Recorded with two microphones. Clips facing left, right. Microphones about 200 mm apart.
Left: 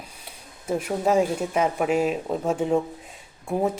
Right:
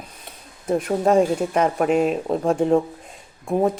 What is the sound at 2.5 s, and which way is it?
Speech, 60° right (ahead or behind).